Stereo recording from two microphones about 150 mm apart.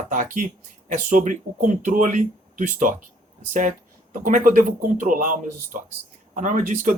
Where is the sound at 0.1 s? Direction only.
60° right (ahead or behind).